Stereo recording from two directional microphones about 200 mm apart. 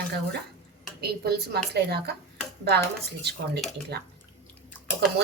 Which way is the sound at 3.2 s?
55° right (ahead or behind).